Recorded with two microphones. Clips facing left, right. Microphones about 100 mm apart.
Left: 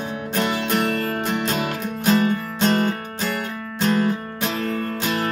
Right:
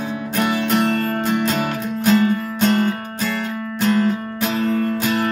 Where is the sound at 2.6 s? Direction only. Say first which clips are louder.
Right 2 dB; 25° left (ahead or behind).